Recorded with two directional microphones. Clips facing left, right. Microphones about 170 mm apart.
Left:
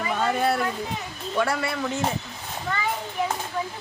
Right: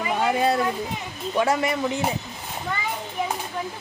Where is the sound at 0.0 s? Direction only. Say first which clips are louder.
Right 2 dB; 15° right (ahead or behind).